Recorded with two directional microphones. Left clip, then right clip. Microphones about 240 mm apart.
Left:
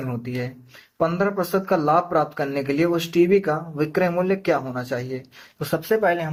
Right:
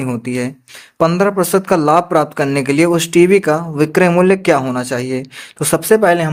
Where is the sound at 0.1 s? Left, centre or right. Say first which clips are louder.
Right 9 dB; right.